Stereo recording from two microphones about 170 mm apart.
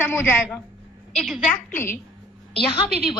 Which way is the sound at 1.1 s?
Centre (ahead or behind).